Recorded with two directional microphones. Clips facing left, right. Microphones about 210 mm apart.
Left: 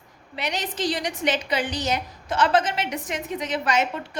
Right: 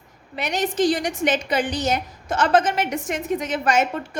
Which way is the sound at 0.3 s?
50° right (ahead or behind).